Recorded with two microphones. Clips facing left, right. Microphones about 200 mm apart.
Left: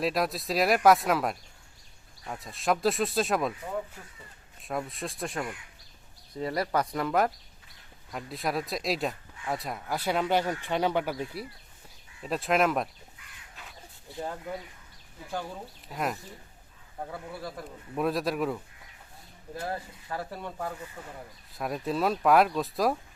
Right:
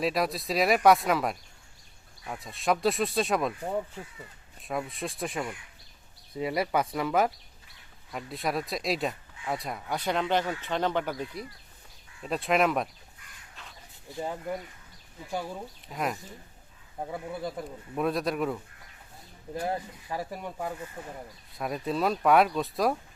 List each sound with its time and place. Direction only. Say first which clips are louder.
0.0 s speech: even; centre (ahead or behind)
4.6 s speech: right 1 dB; centre (ahead or behind)
13.6 s a sound: left 1 dB; centre (ahead or behind)
14.1 s speech: right 2 dB; 15° right (ahead or behind)
15.9 s speech: even; centre (ahead or behind)
17.0 s speech: right 4 dB; 20° right (ahead or behind)
17.9 s speech: even; centre (ahead or behind)
19.5 s speech: right 3 dB; 15° right (ahead or behind)
21.5 s speech: even; centre (ahead or behind)